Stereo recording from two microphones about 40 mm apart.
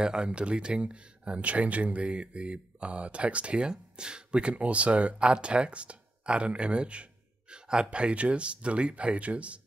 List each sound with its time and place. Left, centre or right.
0.0 s speech: right